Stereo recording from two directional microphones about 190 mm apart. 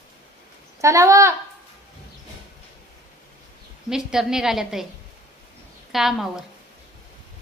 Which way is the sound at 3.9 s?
5° right (ahead or behind).